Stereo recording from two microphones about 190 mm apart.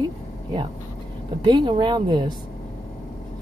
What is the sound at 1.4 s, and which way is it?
Speech, 25° right (ahead or behind).